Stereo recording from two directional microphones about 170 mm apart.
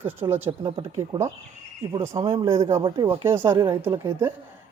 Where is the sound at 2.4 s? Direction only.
20° right (ahead or behind).